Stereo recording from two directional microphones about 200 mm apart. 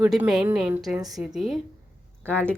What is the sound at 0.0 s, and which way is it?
A woman's voice, 5° right (ahead or behind).